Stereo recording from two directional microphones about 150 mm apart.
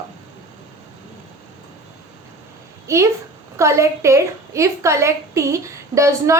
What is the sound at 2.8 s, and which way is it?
A woman's voice, 20° right (ahead or behind).